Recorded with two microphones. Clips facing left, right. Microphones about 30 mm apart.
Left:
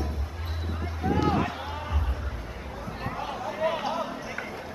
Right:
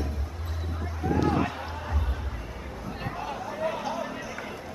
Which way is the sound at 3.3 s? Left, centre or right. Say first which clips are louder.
Left 3 dB; centre.